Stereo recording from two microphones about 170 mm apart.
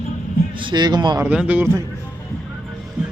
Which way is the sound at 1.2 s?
10° right (ahead or behind).